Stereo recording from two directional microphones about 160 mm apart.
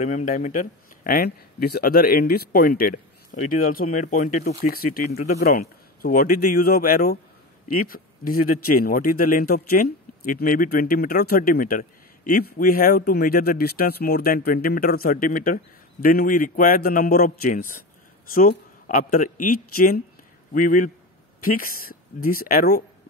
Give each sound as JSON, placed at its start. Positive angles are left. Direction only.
{"t": 0.0, "sound": "speech", "side_deg": 50}
{"t": 4.5, "sound": "speech", "side_deg": 70}
{"t": 5.1, "sound": "speech", "side_deg": 45}